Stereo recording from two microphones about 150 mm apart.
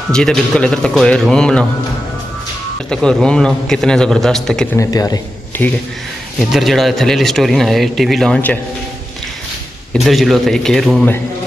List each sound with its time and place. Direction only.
0.1 s speech: 5° left (ahead or behind)
2.9 s speech: 5° left (ahead or behind)
4.7 s speech: 25° left (ahead or behind)
5.5 s speech: 10° left (ahead or behind)
6.5 s speech: centre (ahead or behind)
9.9 s speech: centre (ahead or behind)